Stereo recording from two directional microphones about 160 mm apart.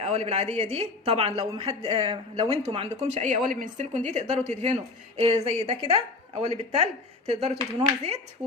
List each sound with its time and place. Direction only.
0.0 s speech: 40° right (ahead or behind)